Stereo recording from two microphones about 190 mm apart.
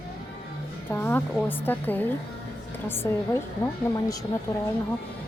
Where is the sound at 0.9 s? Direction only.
10° left (ahead or behind).